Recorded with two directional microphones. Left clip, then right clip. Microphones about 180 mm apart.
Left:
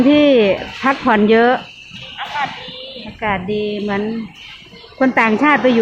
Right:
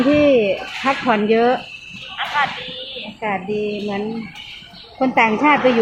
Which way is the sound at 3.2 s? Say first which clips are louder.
Left 3 dB; 15° left (ahead or behind).